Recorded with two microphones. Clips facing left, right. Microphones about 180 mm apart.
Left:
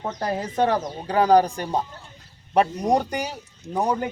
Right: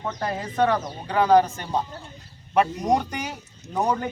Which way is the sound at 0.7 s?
35° left (ahead or behind).